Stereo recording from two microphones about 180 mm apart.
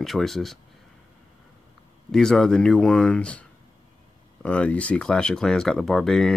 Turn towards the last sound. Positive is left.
turn(degrees=5)  # may be behind; listen again after turning